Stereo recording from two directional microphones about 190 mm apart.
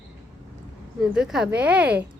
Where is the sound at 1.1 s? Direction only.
5° right (ahead or behind).